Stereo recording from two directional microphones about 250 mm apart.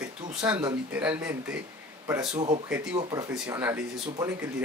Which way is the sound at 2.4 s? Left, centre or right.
Right.